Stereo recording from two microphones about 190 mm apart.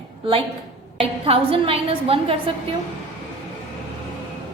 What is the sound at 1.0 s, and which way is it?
A woman's voice, 30° right (ahead or behind).